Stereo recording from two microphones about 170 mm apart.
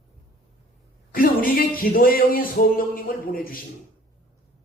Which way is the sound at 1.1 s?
55° left (ahead or behind).